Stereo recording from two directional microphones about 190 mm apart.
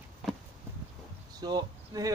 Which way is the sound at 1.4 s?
20° right (ahead or behind).